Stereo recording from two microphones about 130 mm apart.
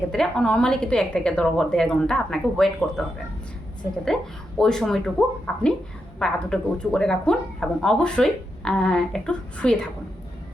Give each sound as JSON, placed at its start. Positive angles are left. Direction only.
{"t": 0.1, "sound": "speech", "side_deg": 5}
{"t": 4.0, "sound": "speech", "side_deg": 5}